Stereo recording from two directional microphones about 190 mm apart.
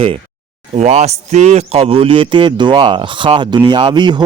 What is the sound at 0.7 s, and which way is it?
A man's voice, 35° right (ahead or behind).